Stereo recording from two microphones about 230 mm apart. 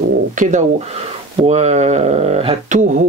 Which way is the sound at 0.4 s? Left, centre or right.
Right.